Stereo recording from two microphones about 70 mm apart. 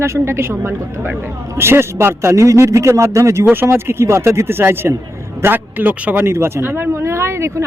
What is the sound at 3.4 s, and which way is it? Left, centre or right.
Speech, right.